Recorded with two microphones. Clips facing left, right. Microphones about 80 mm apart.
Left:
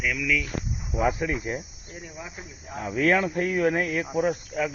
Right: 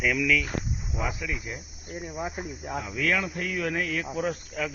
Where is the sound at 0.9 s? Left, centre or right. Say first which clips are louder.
Left 8 dB; left.